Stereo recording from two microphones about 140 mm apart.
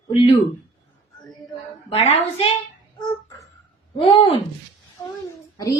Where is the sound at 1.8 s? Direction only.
50° left (ahead or behind).